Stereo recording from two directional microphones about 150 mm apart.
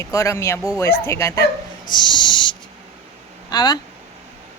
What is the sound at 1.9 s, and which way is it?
Owl, 30° left (ahead or behind).